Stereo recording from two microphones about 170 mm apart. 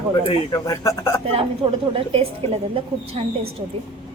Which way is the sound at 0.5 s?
20° left (ahead or behind).